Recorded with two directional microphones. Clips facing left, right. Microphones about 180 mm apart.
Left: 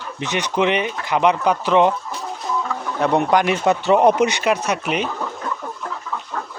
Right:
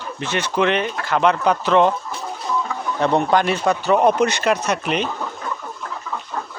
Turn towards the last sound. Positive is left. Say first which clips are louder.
# even
turn(degrees=10)  # may be behind; listen again after turning